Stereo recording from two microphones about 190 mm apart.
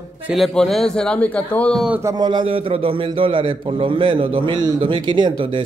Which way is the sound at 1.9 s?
15° right (ahead or behind).